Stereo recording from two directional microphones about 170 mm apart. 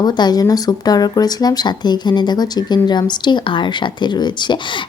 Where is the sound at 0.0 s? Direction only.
25° left (ahead or behind).